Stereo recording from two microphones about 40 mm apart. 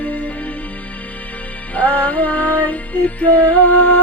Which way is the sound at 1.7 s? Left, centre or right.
Left.